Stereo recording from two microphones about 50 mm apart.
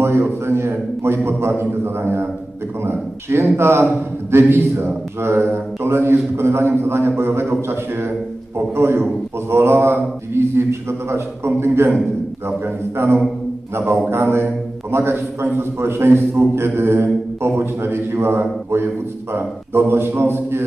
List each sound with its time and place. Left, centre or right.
0.2 s a man's voice: right